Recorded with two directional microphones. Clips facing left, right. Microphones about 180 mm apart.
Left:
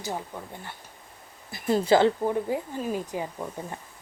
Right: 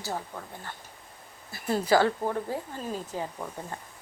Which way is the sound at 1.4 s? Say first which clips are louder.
Left 4 dB; 15° left (ahead or behind).